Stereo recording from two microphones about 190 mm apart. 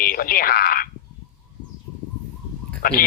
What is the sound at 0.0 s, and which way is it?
Speech, 50° left (ahead or behind).